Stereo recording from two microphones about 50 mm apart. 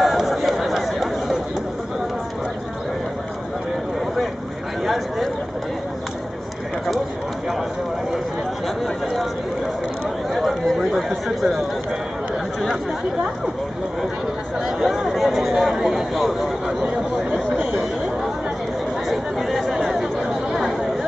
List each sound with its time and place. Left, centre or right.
0.0 s chatter: centre
4.8 s a sound: centre
10.3 s chatter: centre
14.8 s a sound: centre
17.6 s chatter: right
19.0 s chatter: centre